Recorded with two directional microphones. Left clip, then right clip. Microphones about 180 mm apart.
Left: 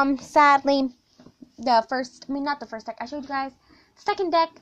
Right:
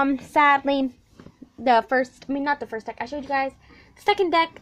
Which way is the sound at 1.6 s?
5° right (ahead or behind).